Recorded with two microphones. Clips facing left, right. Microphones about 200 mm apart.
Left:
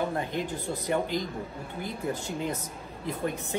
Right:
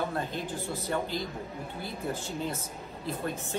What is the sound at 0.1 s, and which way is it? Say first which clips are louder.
Speech: left 3 dB; 15° left (ahead or behind).